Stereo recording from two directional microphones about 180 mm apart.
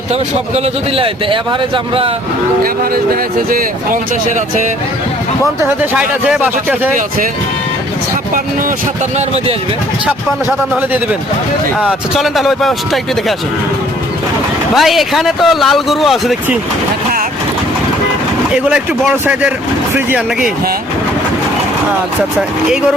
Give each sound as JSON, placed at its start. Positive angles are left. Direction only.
{"t": 0.1, "sound": "speech", "side_deg": -35}
{"t": 5.6, "sound": "speech", "side_deg": -10}
{"t": 9.1, "sound": "speech", "side_deg": -35}
{"t": 11.8, "sound": "speech", "side_deg": -5}
{"t": 14.8, "sound": "speech", "side_deg": 0}
{"t": 18.5, "sound": "speech", "side_deg": -5}
{"t": 22.4, "sound": "speech", "side_deg": -5}